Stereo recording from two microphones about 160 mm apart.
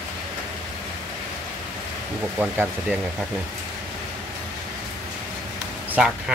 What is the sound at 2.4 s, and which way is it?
Speech, 10° right (ahead or behind).